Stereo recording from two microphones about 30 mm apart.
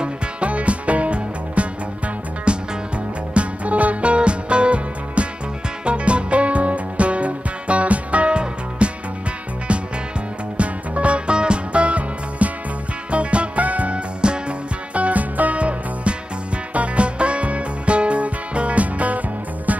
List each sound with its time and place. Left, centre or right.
0.0 s music: right
2.5 s music: right
3.3 s music: right
13.6 s music: right
13.9 s music: right
15.0 s music: right
15.5 s music: right